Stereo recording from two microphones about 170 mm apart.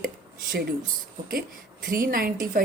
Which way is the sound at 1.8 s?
55° right (ahead or behind).